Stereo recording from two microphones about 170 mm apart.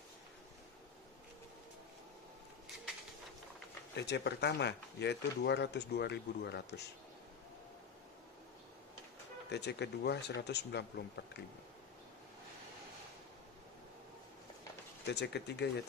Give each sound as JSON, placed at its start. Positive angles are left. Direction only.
{"t": 3.9, "sound": "speech", "side_deg": 90}
{"t": 9.5, "sound": "speech", "side_deg": 80}
{"t": 15.0, "sound": "speech", "side_deg": 80}